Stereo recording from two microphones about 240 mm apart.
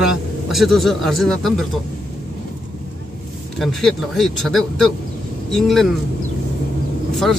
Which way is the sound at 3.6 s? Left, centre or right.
Centre.